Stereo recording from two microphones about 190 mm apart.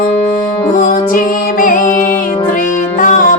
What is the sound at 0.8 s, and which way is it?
Music, 45° left (ahead or behind).